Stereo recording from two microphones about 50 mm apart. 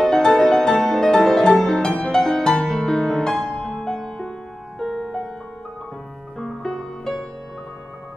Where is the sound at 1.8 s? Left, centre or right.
Centre.